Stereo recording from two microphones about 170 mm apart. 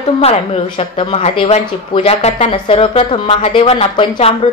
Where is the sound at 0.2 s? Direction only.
35° left (ahead or behind).